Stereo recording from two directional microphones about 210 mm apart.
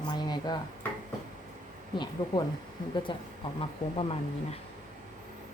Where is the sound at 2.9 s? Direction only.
25° left (ahead or behind).